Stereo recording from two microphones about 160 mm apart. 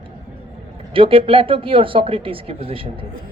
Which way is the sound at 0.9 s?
35° right (ahead or behind).